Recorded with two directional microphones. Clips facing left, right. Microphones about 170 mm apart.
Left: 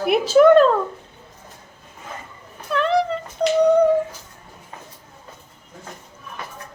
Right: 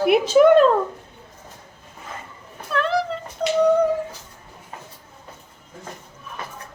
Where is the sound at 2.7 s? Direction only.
Centre (ahead or behind).